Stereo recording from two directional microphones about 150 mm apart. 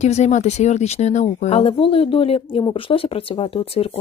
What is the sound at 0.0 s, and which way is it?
Speech, 50° left (ahead or behind).